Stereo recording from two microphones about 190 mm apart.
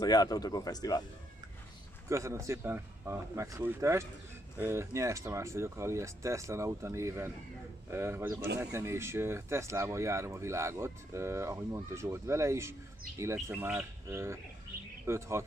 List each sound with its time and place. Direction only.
0.0 s speech: 20° left (ahead or behind)
2.0 s speech: 15° right (ahead or behind)
14.7 s bird: 50° right (ahead or behind)
15.0 s speech: 15° right (ahead or behind)